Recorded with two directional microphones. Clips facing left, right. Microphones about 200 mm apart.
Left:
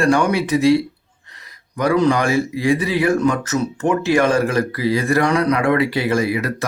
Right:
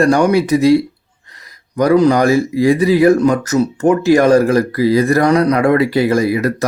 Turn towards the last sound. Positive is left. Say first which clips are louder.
# right 5 dB
turn(degrees=-40)  # may be behind; listen again after turning